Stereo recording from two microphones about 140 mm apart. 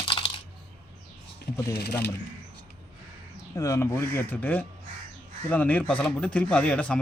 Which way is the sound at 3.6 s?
20° left (ahead or behind).